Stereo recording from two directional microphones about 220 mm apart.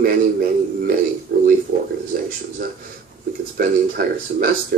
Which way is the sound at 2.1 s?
40° right (ahead or behind).